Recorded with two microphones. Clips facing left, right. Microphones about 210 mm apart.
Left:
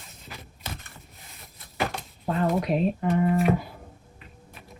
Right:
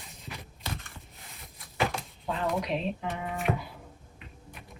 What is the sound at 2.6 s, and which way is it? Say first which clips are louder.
Speech: left 7 dB; 45° left (ahead or behind).